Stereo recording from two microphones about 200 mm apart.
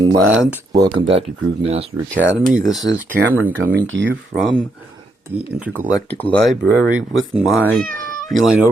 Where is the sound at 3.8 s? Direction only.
70° right (ahead or behind).